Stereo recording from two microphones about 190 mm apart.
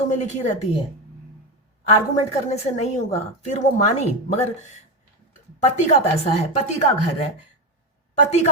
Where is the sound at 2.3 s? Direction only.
35° left (ahead or behind).